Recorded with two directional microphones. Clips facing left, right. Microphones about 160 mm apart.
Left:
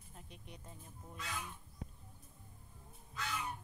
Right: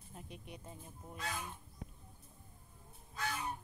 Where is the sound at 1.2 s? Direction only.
35° right (ahead or behind).